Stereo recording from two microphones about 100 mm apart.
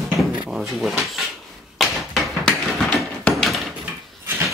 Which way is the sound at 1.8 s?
Centre (ahead or behind).